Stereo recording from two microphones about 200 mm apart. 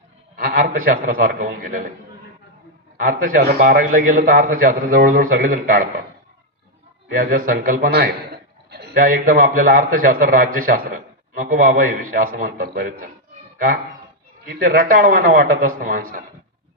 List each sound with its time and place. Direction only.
0.3 s a sound: 45° right (ahead or behind)
0.8 s a man's voice: 45° right (ahead or behind)
3.0 s a man's voice: 45° right (ahead or behind)
7.1 s a man's voice: 45° right (ahead or behind)
14.4 s a man's voice: 45° right (ahead or behind)